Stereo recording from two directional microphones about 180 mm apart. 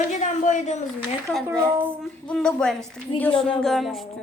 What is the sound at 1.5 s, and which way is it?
Speech, 10° right (ahead or behind).